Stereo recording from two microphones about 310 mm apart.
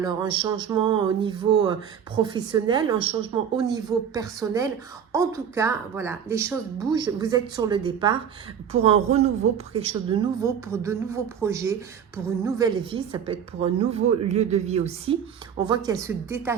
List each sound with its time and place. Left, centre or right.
0.0 s a woman's voice: centre